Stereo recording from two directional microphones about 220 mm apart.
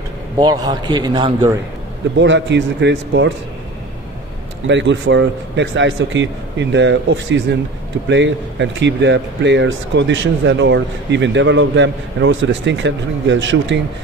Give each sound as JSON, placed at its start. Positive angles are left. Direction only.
{"t": 0.4, "sound": "a man's voice", "side_deg": -20}
{"t": 2.1, "sound": "speech", "side_deg": -55}
{"t": 4.6, "sound": "speech", "side_deg": -55}